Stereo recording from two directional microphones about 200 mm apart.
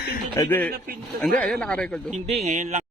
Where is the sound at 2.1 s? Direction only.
35° right (ahead or behind).